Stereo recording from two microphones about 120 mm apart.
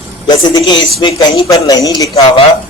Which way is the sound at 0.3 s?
35° left (ahead or behind).